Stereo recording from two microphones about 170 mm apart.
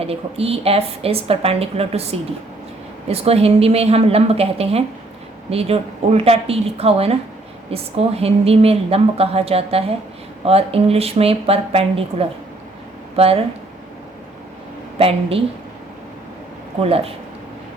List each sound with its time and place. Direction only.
0.0 s a woman's voice: 35° right (ahead or behind)
13.1 s a woman's voice: 35° right (ahead or behind)
14.9 s a woman's voice: 35° right (ahead or behind)
16.8 s a woman's voice: 35° right (ahead or behind)